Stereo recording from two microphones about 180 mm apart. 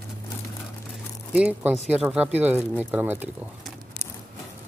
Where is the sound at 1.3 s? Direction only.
10° right (ahead or behind).